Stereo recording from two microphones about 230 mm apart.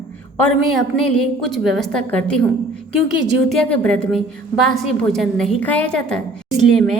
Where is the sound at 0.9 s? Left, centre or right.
Centre.